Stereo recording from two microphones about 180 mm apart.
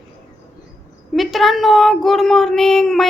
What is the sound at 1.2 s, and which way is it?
A woman's voice, centre (ahead or behind).